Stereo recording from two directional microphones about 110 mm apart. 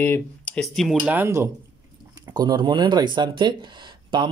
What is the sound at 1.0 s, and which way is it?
Speech, 20° right (ahead or behind).